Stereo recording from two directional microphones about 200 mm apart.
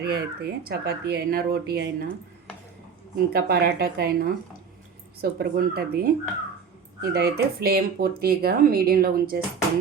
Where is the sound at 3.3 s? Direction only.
50° right (ahead or behind).